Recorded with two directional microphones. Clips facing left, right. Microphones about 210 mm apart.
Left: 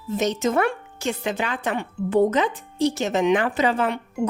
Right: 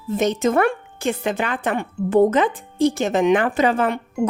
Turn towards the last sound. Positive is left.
turn(degrees=-50)  # may be behind; listen again after turning